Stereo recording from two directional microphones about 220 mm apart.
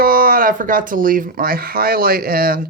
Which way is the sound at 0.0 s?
40° right (ahead or behind).